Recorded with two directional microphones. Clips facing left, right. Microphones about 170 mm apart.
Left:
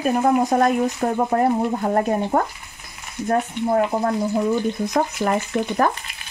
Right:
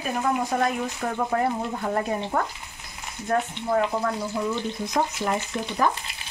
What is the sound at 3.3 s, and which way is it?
Speech, 35° left (ahead or behind).